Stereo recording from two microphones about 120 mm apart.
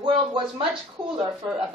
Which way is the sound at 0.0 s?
45° right (ahead or behind).